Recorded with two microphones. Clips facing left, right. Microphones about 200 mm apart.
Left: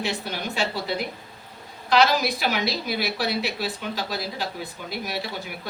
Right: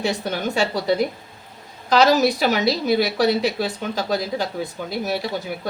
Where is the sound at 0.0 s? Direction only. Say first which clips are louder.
Right 6 dB; 40° right (ahead or behind).